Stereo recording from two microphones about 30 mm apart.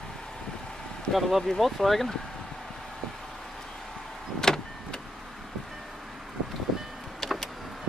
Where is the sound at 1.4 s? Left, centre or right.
Centre.